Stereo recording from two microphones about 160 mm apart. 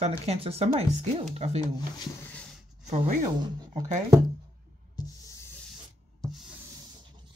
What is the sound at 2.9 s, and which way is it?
Speech, 45° right (ahead or behind).